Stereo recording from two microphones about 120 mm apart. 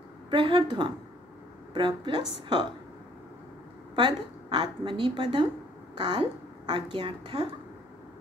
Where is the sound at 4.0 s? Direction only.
40° right (ahead or behind).